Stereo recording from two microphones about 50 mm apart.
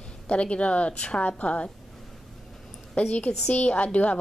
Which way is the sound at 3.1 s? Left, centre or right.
Left.